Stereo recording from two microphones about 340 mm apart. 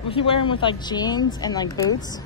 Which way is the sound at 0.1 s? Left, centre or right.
Centre.